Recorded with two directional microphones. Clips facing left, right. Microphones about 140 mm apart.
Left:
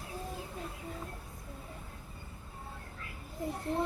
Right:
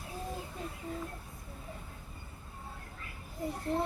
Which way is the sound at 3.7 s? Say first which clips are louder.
Right 1 dB; 20° left (ahead or behind).